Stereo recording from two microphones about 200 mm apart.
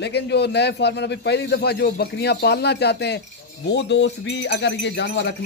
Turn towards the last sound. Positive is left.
turn(degrees=60)  # may be behind; listen again after turning